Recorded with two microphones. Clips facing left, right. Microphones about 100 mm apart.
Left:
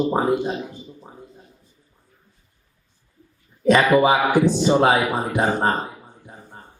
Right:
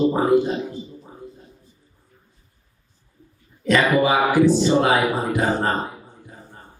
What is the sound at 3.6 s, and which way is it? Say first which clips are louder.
Speech: left 3 dB; 20° left (ahead or behind).